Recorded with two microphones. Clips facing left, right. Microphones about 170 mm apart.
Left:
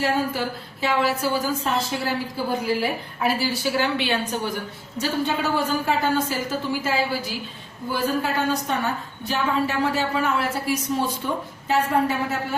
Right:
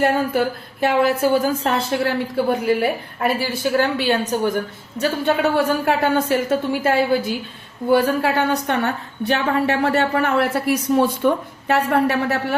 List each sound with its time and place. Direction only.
0.0 s a woman's voice: 55° right (ahead or behind)
7.9 s a woman's voice: 65° right (ahead or behind)